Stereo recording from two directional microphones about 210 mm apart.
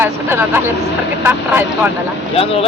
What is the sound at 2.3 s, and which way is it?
Speech, 30° left (ahead or behind).